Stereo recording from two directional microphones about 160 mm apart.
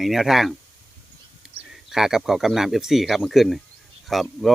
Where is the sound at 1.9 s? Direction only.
5° right (ahead or behind).